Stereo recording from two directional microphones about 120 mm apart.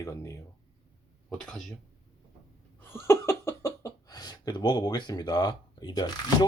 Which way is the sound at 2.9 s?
20° left (ahead or behind).